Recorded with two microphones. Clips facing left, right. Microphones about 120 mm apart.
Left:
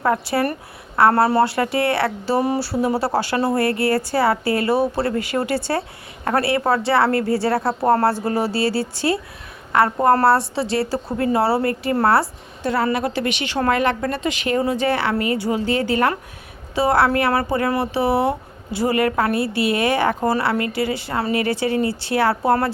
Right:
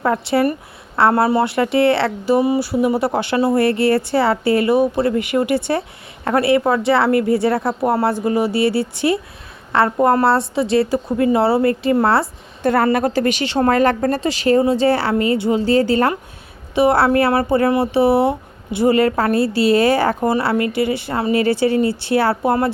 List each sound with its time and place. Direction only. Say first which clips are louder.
0.3 s speech: right 4 dB; 25° right (ahead or behind)
7.4 s speech: right 2 dB; 30° left (ahead or behind)
7.9 s speech: even; 15° right (ahead or behind)
12.6 s a woman's voice: right 5 dB; 55° right (ahead or behind); by 20.1 s 35° right (ahead or behind)
20.1 s speech: right 2 dB; 20° right (ahead or behind)